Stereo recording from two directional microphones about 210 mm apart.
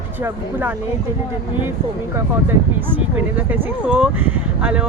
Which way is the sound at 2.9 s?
10° right (ahead or behind).